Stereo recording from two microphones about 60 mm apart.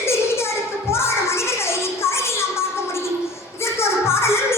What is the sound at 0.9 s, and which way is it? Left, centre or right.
Music, left.